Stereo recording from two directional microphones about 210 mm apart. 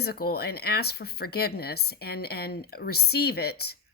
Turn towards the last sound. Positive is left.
turn(degrees=50)  # may be behind; listen again after turning